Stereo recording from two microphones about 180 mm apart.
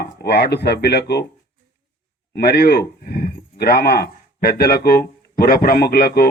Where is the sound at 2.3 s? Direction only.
60° left (ahead or behind).